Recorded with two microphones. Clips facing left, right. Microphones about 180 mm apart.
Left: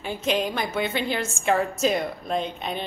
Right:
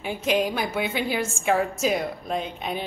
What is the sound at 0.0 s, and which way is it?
A woman's voice, 10° right (ahead or behind).